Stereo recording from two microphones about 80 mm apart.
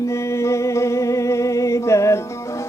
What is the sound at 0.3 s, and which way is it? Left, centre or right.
Music, left.